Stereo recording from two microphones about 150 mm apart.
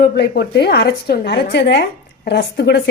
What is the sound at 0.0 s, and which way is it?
A woman's voice, 90° left.